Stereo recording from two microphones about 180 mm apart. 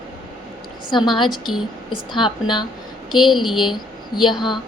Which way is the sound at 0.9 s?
25° left (ahead or behind).